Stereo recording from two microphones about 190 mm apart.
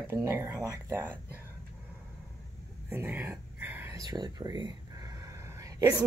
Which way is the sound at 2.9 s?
10° right (ahead or behind).